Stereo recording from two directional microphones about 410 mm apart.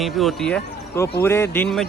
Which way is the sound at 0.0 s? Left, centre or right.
Centre.